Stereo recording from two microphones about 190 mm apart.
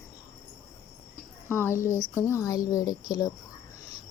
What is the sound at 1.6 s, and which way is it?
A woman's voice, 15° left (ahead or behind).